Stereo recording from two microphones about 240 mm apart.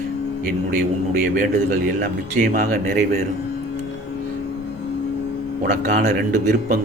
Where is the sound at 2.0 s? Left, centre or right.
Right.